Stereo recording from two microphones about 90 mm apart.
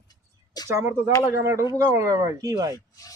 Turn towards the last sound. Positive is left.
turn(degrees=40)  # may be behind; listen again after turning